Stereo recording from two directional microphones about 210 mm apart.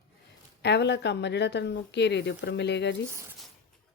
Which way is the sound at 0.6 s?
55° left (ahead or behind).